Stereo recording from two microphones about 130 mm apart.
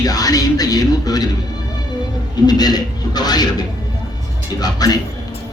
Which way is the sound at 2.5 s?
30° left (ahead or behind).